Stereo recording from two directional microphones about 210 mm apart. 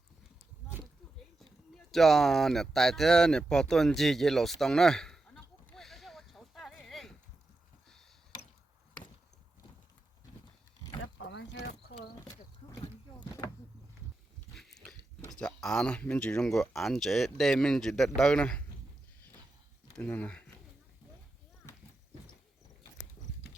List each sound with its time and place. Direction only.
1.9 s a sound: centre (ahead or behind)
11.2 s vehicle: 55° left (ahead or behind)
13.1 s vehicle: 15° left (ahead or behind)
14.5 s speech: centre (ahead or behind)
20.0 s speech: 5° left (ahead or behind)